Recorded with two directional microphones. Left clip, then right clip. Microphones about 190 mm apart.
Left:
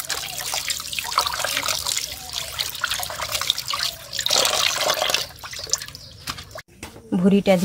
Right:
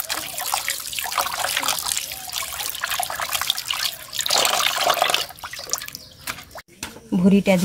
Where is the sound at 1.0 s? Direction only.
5° right (ahead or behind).